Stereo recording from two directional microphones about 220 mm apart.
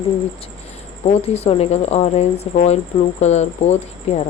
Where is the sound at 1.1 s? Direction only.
30° left (ahead or behind).